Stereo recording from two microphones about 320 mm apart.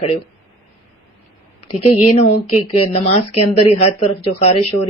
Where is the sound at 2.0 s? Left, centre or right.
Centre.